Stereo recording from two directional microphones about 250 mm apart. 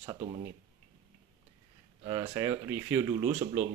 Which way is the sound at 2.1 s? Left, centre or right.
Centre.